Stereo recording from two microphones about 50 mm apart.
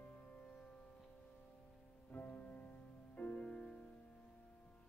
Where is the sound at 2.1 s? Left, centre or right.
Left.